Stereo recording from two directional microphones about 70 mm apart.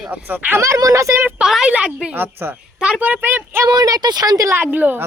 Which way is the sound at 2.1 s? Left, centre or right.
Right.